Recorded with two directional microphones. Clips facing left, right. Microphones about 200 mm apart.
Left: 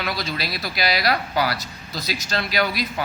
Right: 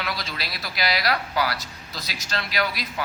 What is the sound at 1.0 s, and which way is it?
Speech, 35° left (ahead or behind).